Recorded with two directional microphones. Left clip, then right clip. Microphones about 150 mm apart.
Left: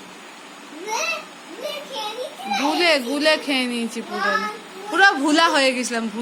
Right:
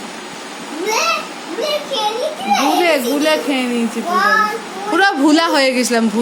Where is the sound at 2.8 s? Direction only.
20° left (ahead or behind).